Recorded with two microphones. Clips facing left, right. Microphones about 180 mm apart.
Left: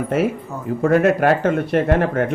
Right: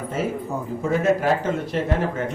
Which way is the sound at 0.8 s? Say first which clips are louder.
Left 6 dB; 65° left (ahead or behind).